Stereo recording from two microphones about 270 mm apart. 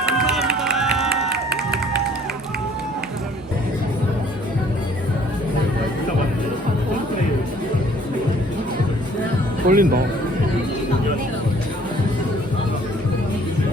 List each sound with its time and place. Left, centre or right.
0.0 s run: centre
9.6 s speech: right